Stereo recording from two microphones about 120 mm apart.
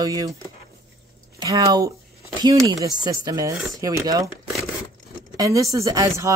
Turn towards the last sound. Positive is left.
turn(degrees=-30)  # may be behind; listen again after turning